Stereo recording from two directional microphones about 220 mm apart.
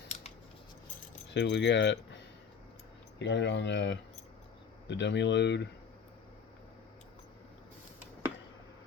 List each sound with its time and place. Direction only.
1.3 s speech: 50° left (ahead or behind)
3.2 s speech: 55° left (ahead or behind)